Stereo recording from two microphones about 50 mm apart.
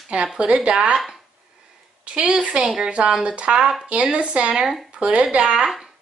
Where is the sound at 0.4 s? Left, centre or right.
Centre.